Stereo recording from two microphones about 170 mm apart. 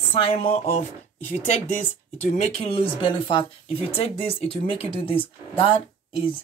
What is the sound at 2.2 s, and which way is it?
Speech, 40° left (ahead or behind).